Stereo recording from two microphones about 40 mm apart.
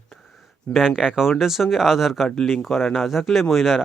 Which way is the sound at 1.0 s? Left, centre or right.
Right.